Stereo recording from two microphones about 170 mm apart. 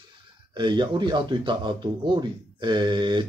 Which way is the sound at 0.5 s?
25° right (ahead or behind).